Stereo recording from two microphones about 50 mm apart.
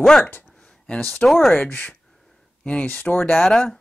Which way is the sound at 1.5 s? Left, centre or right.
Left.